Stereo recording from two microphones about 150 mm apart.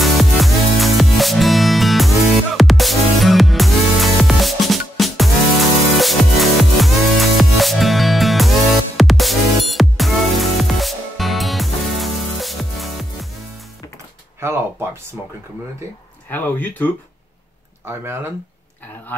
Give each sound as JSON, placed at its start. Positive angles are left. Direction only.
{"t": 0.0, "sound": "music", "side_deg": 0}
{"t": 14.4, "sound": "a sound", "side_deg": -15}
{"t": 16.3, "sound": "speech", "side_deg": 10}
{"t": 17.8, "sound": "speech", "side_deg": -15}